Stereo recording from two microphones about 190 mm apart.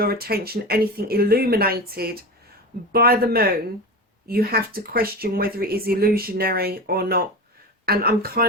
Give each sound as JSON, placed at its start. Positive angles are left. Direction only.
{"t": 0.0, "sound": "speech", "side_deg": -55}